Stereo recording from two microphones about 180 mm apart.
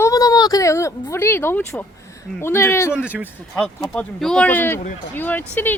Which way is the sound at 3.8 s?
15° left (ahead or behind).